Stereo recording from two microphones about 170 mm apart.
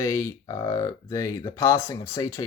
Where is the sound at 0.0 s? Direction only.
20° left (ahead or behind).